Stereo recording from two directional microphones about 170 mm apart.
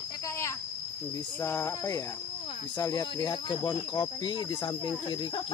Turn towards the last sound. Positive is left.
turn(degrees=25)  # may be behind; listen again after turning